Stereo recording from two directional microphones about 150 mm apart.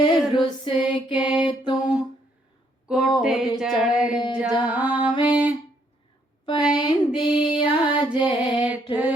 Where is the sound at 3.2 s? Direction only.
5° right (ahead or behind).